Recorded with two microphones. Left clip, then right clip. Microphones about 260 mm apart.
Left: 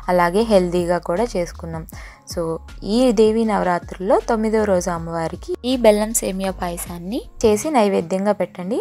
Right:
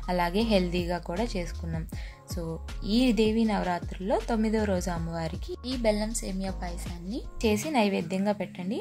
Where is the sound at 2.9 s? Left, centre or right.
Left.